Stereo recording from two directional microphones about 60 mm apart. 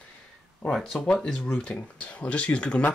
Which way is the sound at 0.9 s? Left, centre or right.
Centre.